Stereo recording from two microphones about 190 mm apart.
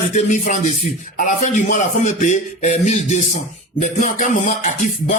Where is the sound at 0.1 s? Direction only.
40° left (ahead or behind).